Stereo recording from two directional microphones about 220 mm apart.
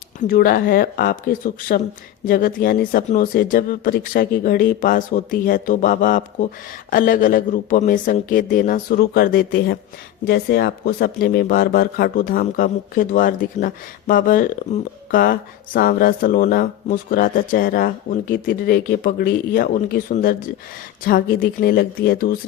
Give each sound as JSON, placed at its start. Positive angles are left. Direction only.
{"t": 0.2, "sound": "speech", "side_deg": 40}